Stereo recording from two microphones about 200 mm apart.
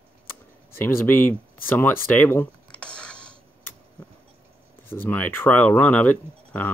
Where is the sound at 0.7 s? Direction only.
10° left (ahead or behind).